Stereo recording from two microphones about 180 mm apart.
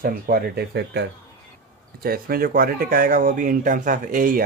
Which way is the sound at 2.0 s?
55° right (ahead or behind).